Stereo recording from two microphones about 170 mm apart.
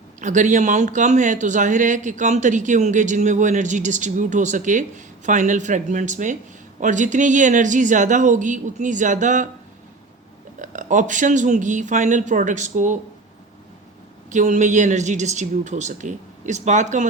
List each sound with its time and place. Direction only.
0.2 s speech: 45° right (ahead or behind)
10.6 s speech: 50° right (ahead or behind)
14.3 s speech: 45° right (ahead or behind)